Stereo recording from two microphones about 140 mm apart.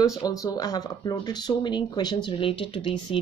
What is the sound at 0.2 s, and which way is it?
Speech, 25° left (ahead or behind).